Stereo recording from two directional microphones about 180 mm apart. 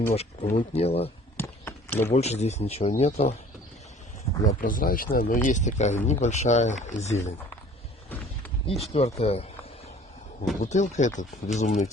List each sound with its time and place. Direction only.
0.1 s speech: 35° left (ahead or behind)
1.4 s a sound: 10° left (ahead or behind)
2.1 s speech: 35° left (ahead or behind)
4.6 s speech: 50° left (ahead or behind)
8.6 s speech: 35° left (ahead or behind)
10.6 s speech: 45° left (ahead or behind)